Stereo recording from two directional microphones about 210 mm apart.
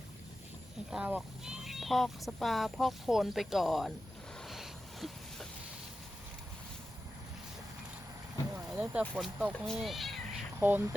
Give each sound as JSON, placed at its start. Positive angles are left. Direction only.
{"t": 0.9, "sound": "speech", "side_deg": -5}
{"t": 4.4, "sound": "a sound", "side_deg": 0}
{"t": 8.8, "sound": "speech", "side_deg": -5}